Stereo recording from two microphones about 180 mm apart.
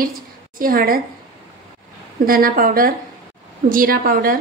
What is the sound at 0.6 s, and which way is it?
Speech, 50° right (ahead or behind).